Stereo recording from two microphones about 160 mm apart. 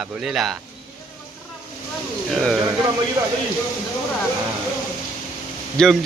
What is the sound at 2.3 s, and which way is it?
Speech, centre (ahead or behind).